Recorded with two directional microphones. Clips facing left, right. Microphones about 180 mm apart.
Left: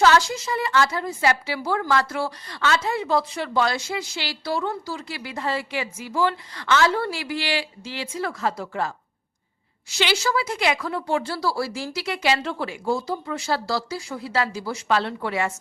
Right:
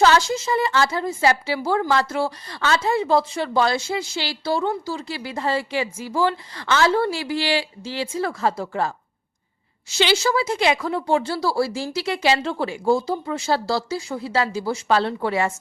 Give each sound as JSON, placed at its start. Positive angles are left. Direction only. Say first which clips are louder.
{"t": 0.0, "sound": "a woman's voice", "louder": "right 1 dB", "side_deg": -25}
{"t": 10.0, "sound": "a woman's voice", "louder": "right 3 dB", "side_deg": -25}